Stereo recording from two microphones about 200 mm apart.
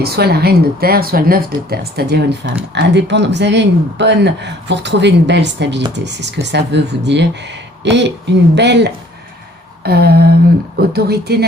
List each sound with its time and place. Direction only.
0.0 s speech: 55° right (ahead or behind)